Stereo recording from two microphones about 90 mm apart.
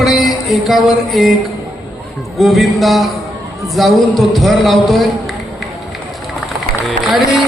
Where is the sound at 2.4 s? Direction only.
Centre (ahead or behind).